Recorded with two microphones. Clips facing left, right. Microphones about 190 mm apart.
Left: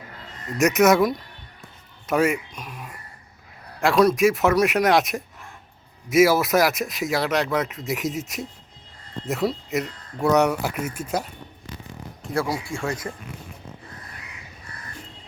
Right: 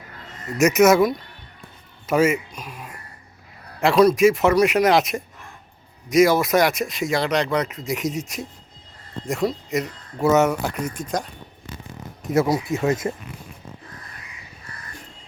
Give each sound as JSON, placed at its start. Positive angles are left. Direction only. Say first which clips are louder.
{"t": 0.6, "sound": "speech", "louder": "right 2 dB", "side_deg": 0}
{"t": 12.3, "sound": "speech", "louder": "right 6 dB", "side_deg": -20}